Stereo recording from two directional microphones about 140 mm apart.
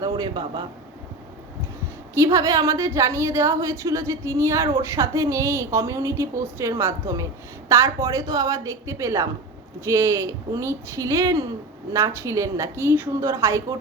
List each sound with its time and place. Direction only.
0.0 s a man's voice: 30° right (ahead or behind)
2.1 s a woman's voice: 25° right (ahead or behind)